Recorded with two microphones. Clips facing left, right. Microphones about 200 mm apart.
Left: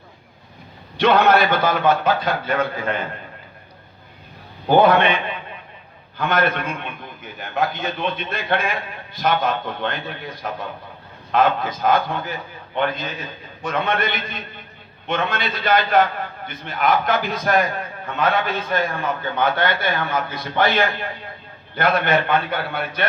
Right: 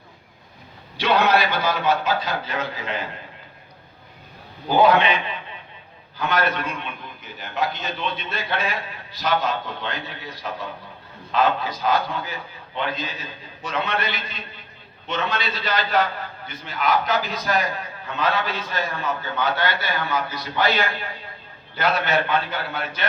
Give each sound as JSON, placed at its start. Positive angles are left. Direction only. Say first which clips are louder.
{"t": 0.9, "sound": "a man's voice", "louder": "left 4 dB", "side_deg": 55}
{"t": 4.7, "sound": "a man's voice", "louder": "left 3 dB", "side_deg": 55}
{"t": 6.1, "sound": "a man's voice", "louder": "left 3 dB", "side_deg": 50}
{"t": 21.8, "sound": "a man's voice", "louder": "left 3 dB", "side_deg": 55}